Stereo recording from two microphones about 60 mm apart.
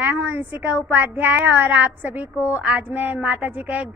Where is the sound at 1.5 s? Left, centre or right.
Right.